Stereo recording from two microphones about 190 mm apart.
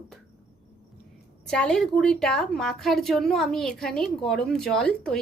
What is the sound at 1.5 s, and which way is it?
A woman's voice, 5° left (ahead or behind).